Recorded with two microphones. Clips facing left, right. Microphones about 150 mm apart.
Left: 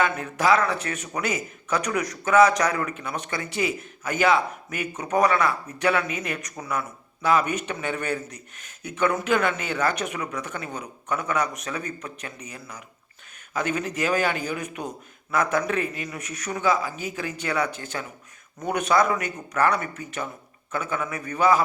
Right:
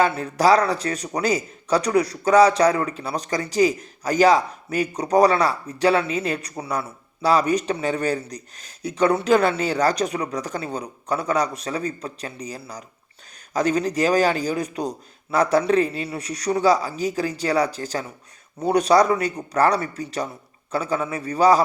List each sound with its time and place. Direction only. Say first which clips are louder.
0.0 s speech: right 5 dB; 35° right (ahead or behind)